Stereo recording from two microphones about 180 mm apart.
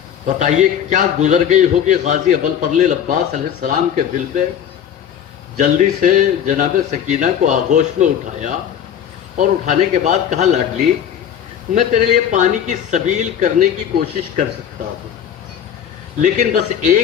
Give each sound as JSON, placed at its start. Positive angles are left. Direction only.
{"t": 0.3, "sound": "a man's voice", "side_deg": -40}
{"t": 5.5, "sound": "a man's voice", "side_deg": -45}
{"t": 11.7, "sound": "a man's voice", "side_deg": -45}
{"t": 16.2, "sound": "a man's voice", "side_deg": -45}